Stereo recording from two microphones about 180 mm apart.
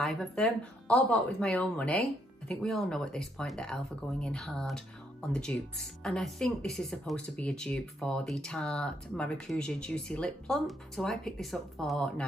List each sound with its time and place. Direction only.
0.0 s speech: centre (ahead or behind)